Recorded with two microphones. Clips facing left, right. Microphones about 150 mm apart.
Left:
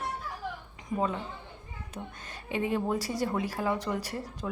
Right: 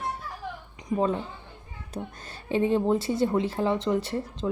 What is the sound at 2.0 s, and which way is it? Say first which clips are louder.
A woman's voice: right 6 dB; 30° right (ahead or behind).